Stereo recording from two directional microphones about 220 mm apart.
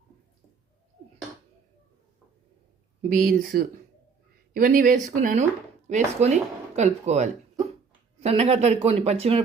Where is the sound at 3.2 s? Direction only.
40° right (ahead or behind).